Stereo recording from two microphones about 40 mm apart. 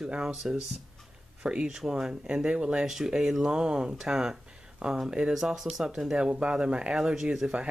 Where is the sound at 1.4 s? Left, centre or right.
Centre.